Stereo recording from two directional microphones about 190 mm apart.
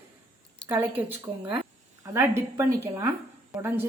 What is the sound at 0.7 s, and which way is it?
A woman's voice, 10° right (ahead or behind).